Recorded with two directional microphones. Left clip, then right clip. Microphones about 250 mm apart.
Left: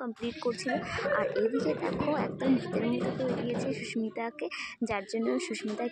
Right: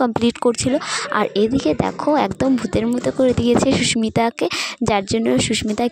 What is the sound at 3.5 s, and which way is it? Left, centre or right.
Speech, right.